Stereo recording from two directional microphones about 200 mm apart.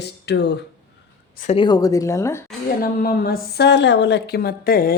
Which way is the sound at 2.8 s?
45° left (ahead or behind).